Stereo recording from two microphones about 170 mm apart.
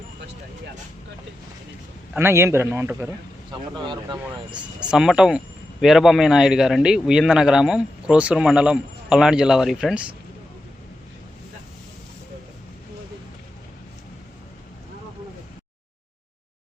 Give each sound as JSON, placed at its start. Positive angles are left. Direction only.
{"t": 2.1, "sound": "a man's voice", "side_deg": -15}
{"t": 3.8, "sound": "speech", "side_deg": -25}
{"t": 4.9, "sound": "speech", "side_deg": -5}